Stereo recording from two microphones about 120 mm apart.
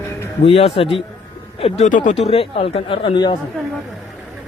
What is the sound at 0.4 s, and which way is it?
Speech, 55° left (ahead or behind).